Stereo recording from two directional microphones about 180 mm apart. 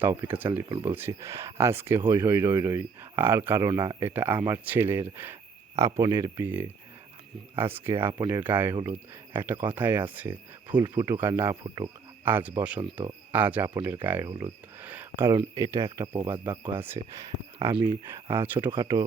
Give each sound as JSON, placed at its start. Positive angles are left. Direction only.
{"t": 0.0, "sound": "speech", "side_deg": -15}
{"t": 10.7, "sound": "speech", "side_deg": -25}
{"t": 10.9, "sound": "speech", "side_deg": -15}
{"t": 18.8, "sound": "speech", "side_deg": -20}